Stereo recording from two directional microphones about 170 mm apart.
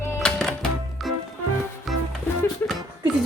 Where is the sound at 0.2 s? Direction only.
5° left (ahead or behind).